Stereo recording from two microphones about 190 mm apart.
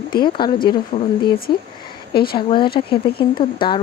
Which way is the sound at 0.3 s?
25° left (ahead or behind).